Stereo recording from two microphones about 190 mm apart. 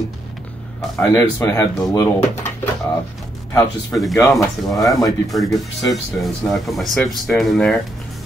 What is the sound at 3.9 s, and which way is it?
Speech, centre (ahead or behind).